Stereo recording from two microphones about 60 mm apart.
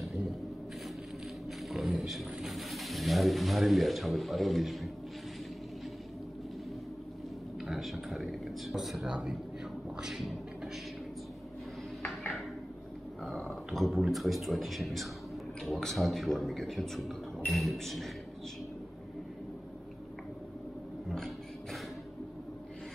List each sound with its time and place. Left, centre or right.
1.7 s speech: centre
7.6 s speech: centre
10.0 s a sound: centre
13.2 s dog: centre
13.7 s a man's voice: centre